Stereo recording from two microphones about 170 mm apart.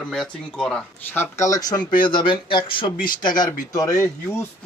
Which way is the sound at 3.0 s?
55° left (ahead or behind).